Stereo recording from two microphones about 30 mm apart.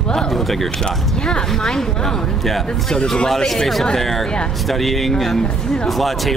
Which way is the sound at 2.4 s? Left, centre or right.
Centre.